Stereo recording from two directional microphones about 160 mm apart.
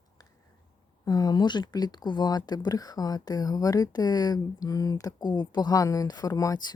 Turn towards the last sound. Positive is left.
turn(degrees=25)  # may be behind; listen again after turning